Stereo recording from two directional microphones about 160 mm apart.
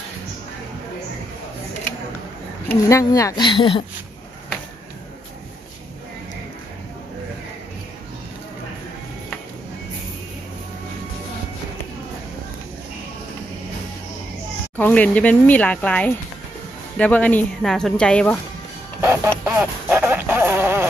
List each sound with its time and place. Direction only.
2.9 s speech: 20° left (ahead or behind)
14.8 s speech: 10° left (ahead or behind)
18.9 s a sound: 15° right (ahead or behind)